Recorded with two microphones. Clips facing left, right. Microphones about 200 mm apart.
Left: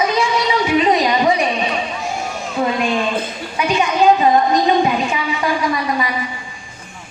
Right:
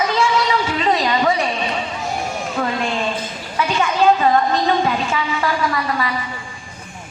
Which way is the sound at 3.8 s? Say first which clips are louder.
Left 2 dB; 15° left (ahead or behind).